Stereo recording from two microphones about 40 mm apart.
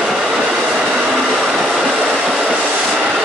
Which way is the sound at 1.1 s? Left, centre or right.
Centre.